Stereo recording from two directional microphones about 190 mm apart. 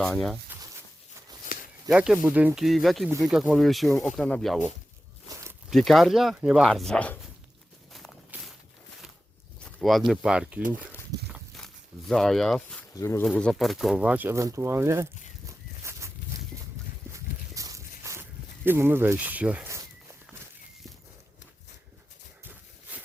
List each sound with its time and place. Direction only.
0.0 s speech: centre (ahead or behind)
1.5 s a sound: 50° left (ahead or behind)
1.9 s speech: 5° right (ahead or behind)
5.7 s speech: centre (ahead or behind)
7.9 s walk: centre (ahead or behind)
9.6 s a sound: centre (ahead or behind)
10.1 s speech: 5° right (ahead or behind)
11.3 s walk: centre (ahead or behind)
12.9 s speech: 15° left (ahead or behind)
13.2 s speech: 5° left (ahead or behind); by 15.0 s 15° right (ahead or behind)
15.4 s a sound: 15° right (ahead or behind)
17.1 s walk: 15° right (ahead or behind)
22.4 s a sound: 10° right (ahead or behind)